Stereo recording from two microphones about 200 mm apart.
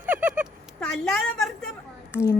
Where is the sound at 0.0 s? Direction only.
10° right (ahead or behind).